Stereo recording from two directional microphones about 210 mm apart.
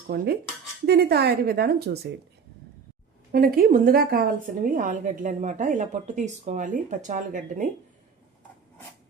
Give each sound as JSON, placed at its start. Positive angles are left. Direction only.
{"t": 0.1, "sound": "a woman's voice", "side_deg": -50}
{"t": 3.3, "sound": "a woman's voice", "side_deg": -45}